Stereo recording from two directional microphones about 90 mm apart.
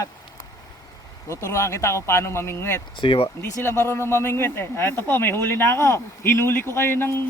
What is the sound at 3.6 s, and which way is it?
Speech, 25° left (ahead or behind).